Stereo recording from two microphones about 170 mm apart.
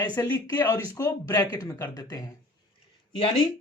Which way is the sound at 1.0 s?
20° left (ahead or behind).